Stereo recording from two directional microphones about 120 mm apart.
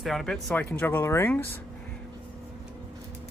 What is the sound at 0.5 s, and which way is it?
Speech, 15° left (ahead or behind).